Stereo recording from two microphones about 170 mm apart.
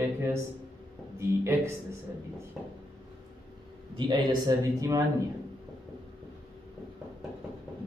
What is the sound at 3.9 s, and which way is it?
A man's voice, 25° right (ahead or behind).